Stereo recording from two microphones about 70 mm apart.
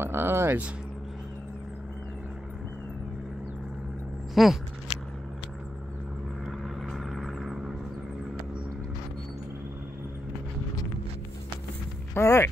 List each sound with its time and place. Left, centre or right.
0.0 s speech: right
4.4 s speech: centre
6.4 s vehicle: centre
12.1 s speech: left